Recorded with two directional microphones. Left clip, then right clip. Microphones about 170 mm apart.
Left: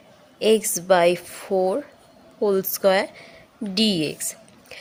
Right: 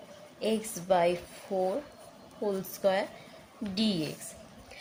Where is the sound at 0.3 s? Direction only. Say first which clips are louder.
Left 13 dB; 45° left (ahead or behind).